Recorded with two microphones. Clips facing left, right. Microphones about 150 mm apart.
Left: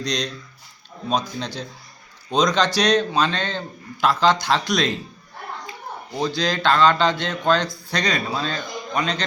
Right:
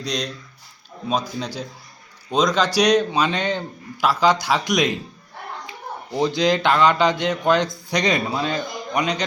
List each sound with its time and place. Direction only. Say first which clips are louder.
0.0 s speech: left 1 dB; 5° right (ahead or behind)
6.1 s speech: right 4 dB; 20° right (ahead or behind)